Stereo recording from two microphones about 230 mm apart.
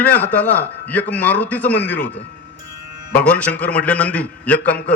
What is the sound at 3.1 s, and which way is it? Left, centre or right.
A man's voice, centre.